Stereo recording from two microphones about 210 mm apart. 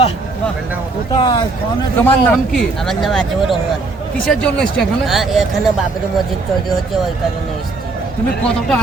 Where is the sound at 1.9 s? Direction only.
10° left (ahead or behind).